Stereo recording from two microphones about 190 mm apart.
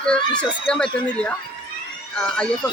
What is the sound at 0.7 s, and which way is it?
Speech, 5° left (ahead or behind).